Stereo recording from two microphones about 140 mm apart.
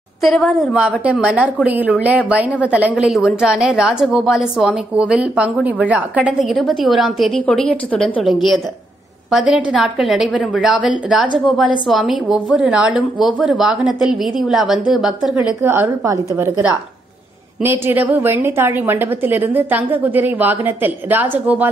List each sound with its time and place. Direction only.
0.2 s a woman's voice: centre (ahead or behind)
8.2 s a woman's voice: centre (ahead or behind)
15.6 s a woman's voice: 15° right (ahead or behind)